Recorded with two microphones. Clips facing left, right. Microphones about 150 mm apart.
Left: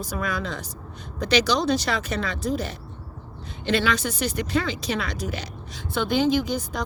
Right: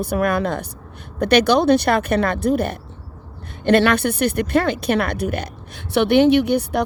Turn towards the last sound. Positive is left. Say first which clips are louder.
# right 7 dB
turn(degrees=-65)  # may be behind; listen again after turning